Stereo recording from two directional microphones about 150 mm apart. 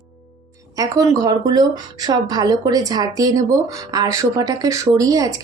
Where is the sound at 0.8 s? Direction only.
20° right (ahead or behind).